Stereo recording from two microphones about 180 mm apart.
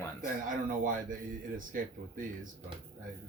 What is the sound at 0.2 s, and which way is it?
Speech, 45° right (ahead or behind).